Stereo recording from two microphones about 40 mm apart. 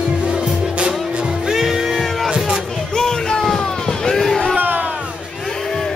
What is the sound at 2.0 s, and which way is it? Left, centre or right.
Music, centre.